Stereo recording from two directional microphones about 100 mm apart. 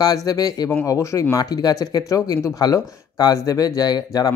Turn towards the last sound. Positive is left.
turn(degrees=40)  # may be behind; listen again after turning